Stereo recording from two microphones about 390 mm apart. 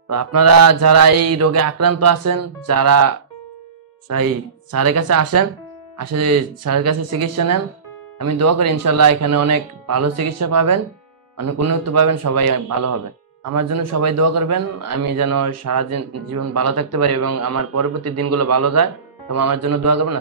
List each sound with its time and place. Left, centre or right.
0.1 s speech: right
4.1 s speech: right
12.4 s speech: right